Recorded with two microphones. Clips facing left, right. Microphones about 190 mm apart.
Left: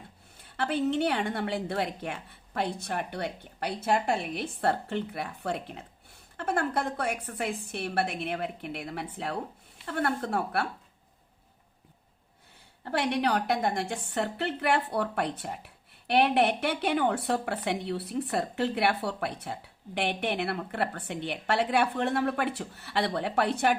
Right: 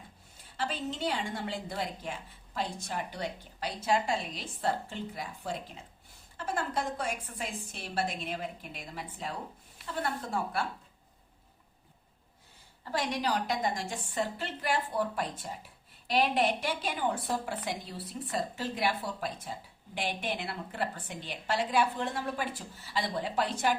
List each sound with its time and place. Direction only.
0.5 s a woman's voice: 60° left (ahead or behind)
12.8 s a woman's voice: 60° left (ahead or behind)